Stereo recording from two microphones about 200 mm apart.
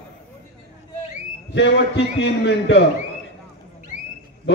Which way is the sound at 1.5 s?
60° left (ahead or behind).